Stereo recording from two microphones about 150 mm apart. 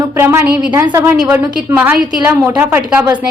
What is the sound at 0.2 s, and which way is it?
A woman's voice, 20° right (ahead or behind).